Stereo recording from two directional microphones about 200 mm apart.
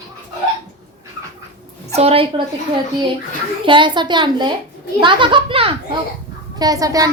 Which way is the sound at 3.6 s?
25° right (ahead or behind).